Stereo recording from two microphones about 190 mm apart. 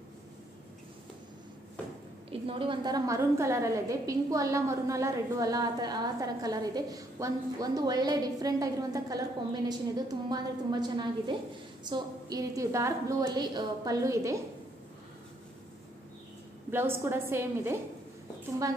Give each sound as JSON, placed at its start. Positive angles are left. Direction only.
{"t": 2.4, "sound": "a woman's voice", "side_deg": -25}
{"t": 16.7, "sound": "a woman's voice", "side_deg": -10}